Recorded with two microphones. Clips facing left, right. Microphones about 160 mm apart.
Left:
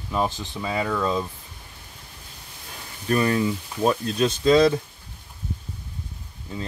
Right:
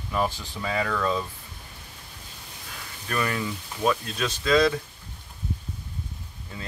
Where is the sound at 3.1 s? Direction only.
30° left (ahead or behind).